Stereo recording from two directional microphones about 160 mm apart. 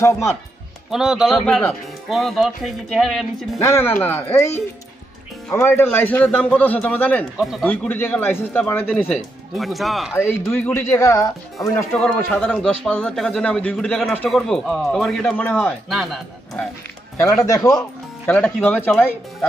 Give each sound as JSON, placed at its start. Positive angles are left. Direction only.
{"t": 0.0, "sound": "a man's voice", "side_deg": 20}
{"t": 0.8, "sound": "a man's voice", "side_deg": -5}
{"t": 1.3, "sound": "a man's voice", "side_deg": 10}
{"t": 3.5, "sound": "a man's voice", "side_deg": 15}
{"t": 9.6, "sound": "a man's voice", "side_deg": 0}
{"t": 10.1, "sound": "a man's voice", "side_deg": 15}
{"t": 15.9, "sound": "a man's voice", "side_deg": 0}
{"t": 17.5, "sound": "speech", "side_deg": 20}
{"t": 18.2, "sound": "a man's voice", "side_deg": 10}